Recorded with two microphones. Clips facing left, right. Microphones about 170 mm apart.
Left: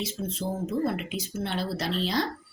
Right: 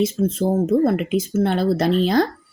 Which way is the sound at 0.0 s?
50° right (ahead or behind).